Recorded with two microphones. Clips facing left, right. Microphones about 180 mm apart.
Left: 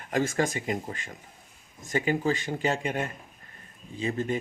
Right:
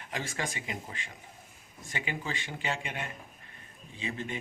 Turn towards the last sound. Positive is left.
turn(degrees=40)  # may be behind; listen again after turning